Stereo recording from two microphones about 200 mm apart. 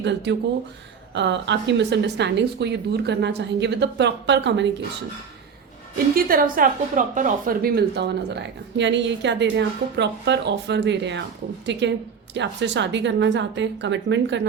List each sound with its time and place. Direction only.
0.0 s a woman's voice: 60° right (ahead or behind)
6.1 s a woman's voice: 45° right (ahead or behind); by 14.4 s 65° right (ahead or behind)